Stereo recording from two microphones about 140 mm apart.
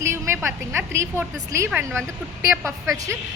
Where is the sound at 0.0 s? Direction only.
20° right (ahead or behind).